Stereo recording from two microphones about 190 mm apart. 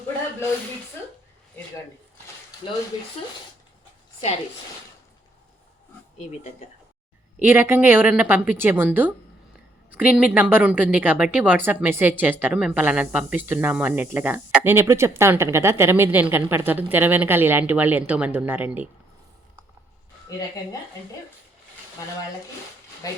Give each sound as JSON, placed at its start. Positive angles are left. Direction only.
{"t": 7.4, "sound": "a woman's voice", "side_deg": -10}
{"t": 20.3, "sound": "speech", "side_deg": 20}
{"t": 23.0, "sound": "speech", "side_deg": 20}